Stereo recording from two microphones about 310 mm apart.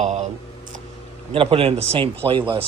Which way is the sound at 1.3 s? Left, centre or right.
Centre.